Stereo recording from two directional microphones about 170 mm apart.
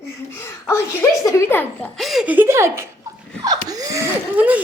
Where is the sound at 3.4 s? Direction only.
20° right (ahead or behind).